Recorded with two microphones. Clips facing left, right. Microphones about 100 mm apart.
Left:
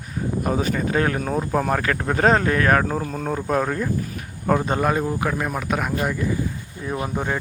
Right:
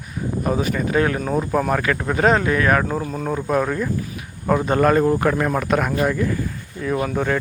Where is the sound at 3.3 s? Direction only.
35° left (ahead or behind).